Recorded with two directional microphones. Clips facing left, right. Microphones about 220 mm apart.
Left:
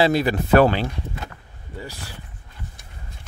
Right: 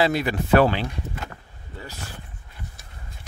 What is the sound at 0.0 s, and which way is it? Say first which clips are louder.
Speech: left 3 dB; 35° left (ahead or behind).